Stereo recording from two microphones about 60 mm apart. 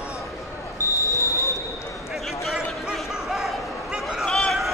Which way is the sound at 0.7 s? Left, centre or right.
Left.